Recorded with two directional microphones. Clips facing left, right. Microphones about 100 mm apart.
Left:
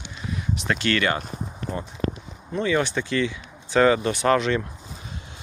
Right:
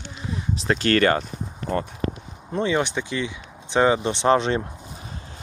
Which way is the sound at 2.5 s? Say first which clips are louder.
Even; 25° right (ahead or behind).